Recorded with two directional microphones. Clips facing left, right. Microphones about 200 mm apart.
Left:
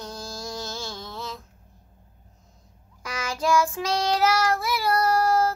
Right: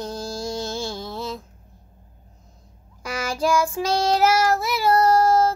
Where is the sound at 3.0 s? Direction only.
30° right (ahead or behind).